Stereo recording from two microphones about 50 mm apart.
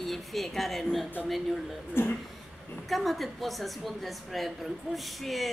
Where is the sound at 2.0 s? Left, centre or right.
Left.